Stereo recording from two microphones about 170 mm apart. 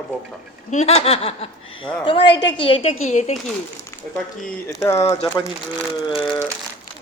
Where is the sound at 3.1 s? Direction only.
40° left (ahead or behind).